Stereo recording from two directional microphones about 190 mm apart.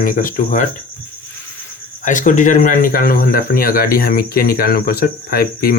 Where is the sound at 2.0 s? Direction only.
40° left (ahead or behind).